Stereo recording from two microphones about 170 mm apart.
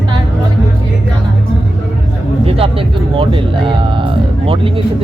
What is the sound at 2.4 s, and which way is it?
Speech, 35° right (ahead or behind).